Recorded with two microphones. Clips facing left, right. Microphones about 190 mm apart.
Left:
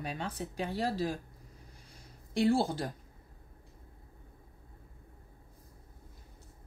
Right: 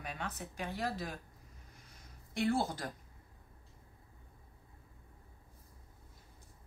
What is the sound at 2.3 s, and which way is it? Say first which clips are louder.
Speech: left 5 dB; 30° left (ahead or behind).